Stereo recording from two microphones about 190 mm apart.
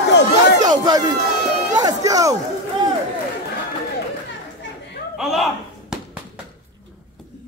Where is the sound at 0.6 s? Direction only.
20° right (ahead or behind).